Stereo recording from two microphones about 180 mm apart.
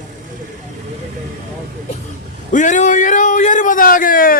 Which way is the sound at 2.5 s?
45° left (ahead or behind).